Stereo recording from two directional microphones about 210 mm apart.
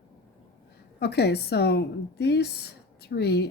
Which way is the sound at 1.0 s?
50° left (ahead or behind).